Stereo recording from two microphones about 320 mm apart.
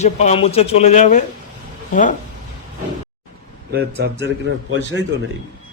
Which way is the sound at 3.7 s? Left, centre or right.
Right.